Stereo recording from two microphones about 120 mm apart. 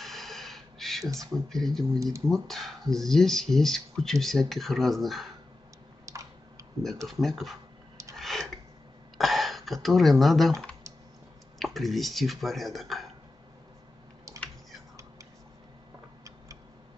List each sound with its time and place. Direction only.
0.0 s a sound: centre (ahead or behind)
1.3 s speech: 5° left (ahead or behind)
6.1 s typing: 25° right (ahead or behind)
7.1 s speech: centre (ahead or behind)
8.2 s a sound: centre (ahead or behind)
9.2 s speech: centre (ahead or behind)
11.6 s speech: centre (ahead or behind)